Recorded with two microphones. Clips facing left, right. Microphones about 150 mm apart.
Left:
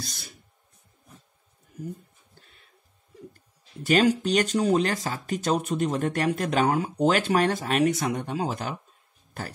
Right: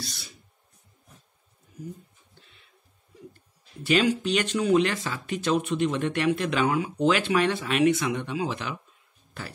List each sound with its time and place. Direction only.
0.0 s speech: 45° left (ahead or behind)
2.4 s a sound: 45° left (ahead or behind)
3.8 s speech: 40° left (ahead or behind)